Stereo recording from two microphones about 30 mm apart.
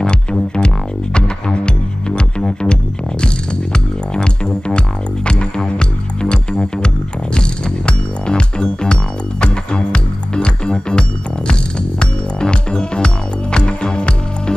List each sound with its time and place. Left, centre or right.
0.0 s music: left
3.7 s music: left